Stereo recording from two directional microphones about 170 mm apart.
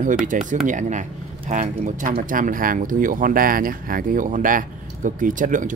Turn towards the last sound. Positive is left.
turn(degrees=-50)  # may be behind; listen again after turning